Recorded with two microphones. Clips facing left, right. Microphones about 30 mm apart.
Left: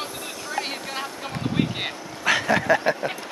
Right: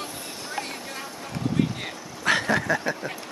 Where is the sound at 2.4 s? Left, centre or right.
Centre.